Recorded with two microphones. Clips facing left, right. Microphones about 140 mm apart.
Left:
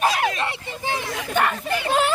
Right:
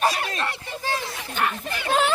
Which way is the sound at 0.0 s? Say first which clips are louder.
Left 3 dB; 20° left (ahead or behind).